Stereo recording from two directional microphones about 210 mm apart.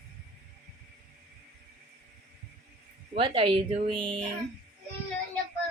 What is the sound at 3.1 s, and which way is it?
Speech, 25° right (ahead or behind).